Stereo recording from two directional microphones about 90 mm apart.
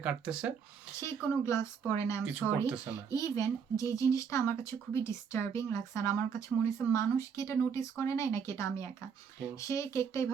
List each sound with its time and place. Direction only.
0.0 s speech: 15° right (ahead or behind)
1.0 s speech: 30° left (ahead or behind)